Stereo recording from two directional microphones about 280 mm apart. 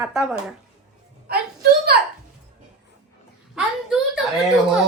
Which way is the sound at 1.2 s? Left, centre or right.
Right.